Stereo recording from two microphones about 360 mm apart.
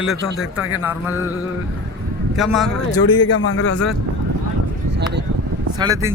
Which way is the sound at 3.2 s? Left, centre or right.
Left.